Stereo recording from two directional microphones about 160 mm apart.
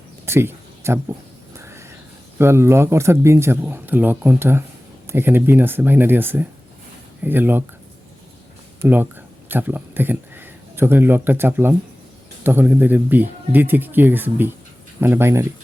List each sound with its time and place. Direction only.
0.3 s a sound: 15° right (ahead or behind)
2.4 s speech: 15° right (ahead or behind)
8.8 s speech: 10° right (ahead or behind)